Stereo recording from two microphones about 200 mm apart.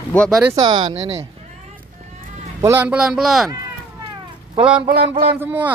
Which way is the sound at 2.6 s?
10° right (ahead or behind).